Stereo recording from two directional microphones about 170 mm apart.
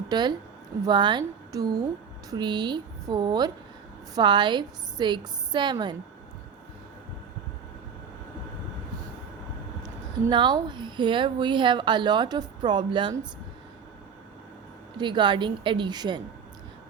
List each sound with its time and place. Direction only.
0.1 s a woman's voice: 25° right (ahead or behind)
9.8 s a woman's voice: 25° right (ahead or behind)
14.9 s a woman's voice: 25° right (ahead or behind)